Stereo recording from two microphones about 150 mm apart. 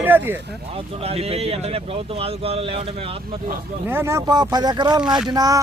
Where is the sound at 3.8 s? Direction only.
15° right (ahead or behind).